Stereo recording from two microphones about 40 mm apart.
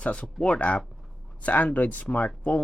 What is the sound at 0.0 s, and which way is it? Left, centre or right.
Speech, left.